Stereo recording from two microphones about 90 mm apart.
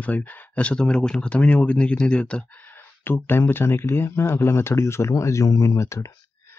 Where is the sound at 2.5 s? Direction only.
20° left (ahead or behind).